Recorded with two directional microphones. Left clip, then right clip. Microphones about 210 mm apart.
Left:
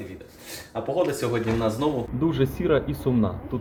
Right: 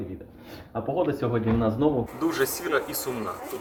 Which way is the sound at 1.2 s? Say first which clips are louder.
Left 1 dB; 15° right (ahead or behind).